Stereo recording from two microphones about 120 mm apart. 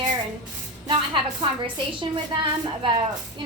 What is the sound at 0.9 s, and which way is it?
A woman's voice, 45° right (ahead or behind).